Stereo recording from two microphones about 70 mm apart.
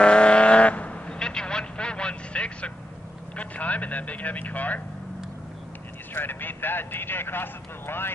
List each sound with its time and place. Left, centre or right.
0.0 s vehicle: centre
3.3 s speech: left
6.1 s speech: left